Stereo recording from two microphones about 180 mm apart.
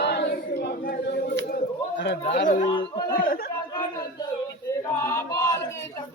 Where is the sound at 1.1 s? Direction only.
75° left (ahead or behind).